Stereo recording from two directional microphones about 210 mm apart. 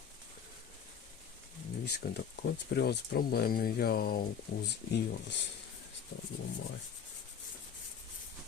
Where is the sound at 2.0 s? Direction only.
50° left (ahead or behind).